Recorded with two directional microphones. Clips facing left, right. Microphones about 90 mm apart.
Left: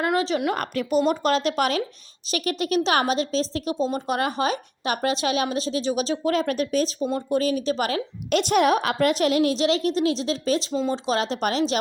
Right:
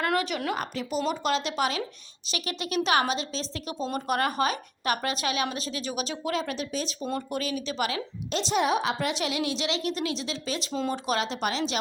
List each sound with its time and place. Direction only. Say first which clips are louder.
0.2 s speech: left 6 dB; 30° left (ahead or behind)
0.4 s a woman's voice: left 5 dB; 55° left (ahead or behind)
7.3 s a woman's voice: left 8 dB; 35° left (ahead or behind)
8.3 s a woman's voice: left 6 dB; 60° left (ahead or behind); by 10.6 s 40° left (ahead or behind)
10.9 s speech: left 4 dB; 25° left (ahead or behind)
11.2 s a woman's voice: left 5 dB; 40° left (ahead or behind)